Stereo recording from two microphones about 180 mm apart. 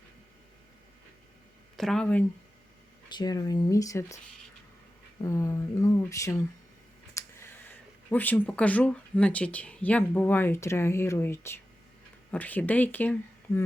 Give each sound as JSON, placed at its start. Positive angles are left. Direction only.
{"t": 1.7, "sound": "speech", "side_deg": 0}
{"t": 3.1, "sound": "speech", "side_deg": 25}
{"t": 5.2, "sound": "speech", "side_deg": 15}
{"t": 7.2, "sound": "clicking", "side_deg": 15}
{"t": 8.1, "sound": "speech", "side_deg": 10}